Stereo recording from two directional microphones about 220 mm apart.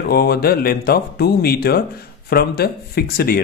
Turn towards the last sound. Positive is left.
turn(degrees=45)  # may be behind; listen again after turning